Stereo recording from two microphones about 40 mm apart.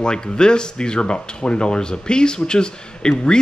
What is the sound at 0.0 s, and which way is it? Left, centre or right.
Speech, left.